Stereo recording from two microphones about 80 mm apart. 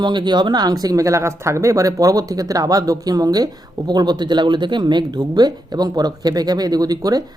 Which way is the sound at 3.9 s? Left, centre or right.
Right.